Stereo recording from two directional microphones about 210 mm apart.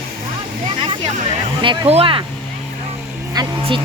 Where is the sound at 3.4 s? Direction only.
20° right (ahead or behind).